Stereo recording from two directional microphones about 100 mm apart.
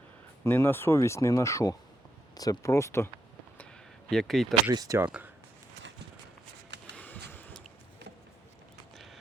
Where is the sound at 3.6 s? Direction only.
5° left (ahead or behind).